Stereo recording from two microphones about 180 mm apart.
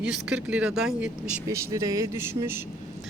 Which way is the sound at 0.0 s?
5° right (ahead or behind).